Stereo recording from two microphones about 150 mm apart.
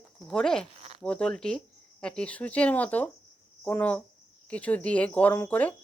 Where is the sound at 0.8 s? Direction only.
40° right (ahead or behind).